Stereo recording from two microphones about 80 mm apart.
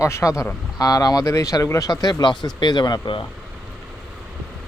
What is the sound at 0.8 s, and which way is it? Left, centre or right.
Speech, left.